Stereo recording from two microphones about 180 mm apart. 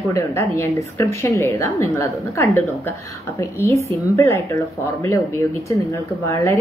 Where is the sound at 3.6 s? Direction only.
15° left (ahead or behind).